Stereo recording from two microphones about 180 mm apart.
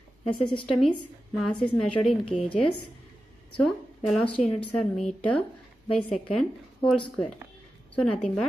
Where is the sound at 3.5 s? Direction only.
5° left (ahead or behind).